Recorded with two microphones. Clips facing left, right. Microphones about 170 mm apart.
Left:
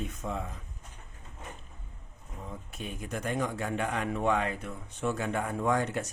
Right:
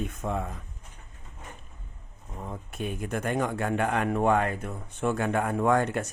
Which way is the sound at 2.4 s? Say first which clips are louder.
Right 6 dB; 55° right (ahead or behind).